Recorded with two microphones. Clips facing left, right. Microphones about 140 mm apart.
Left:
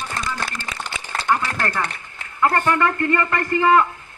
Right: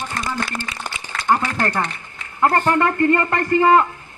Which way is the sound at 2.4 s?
25° right (ahead or behind).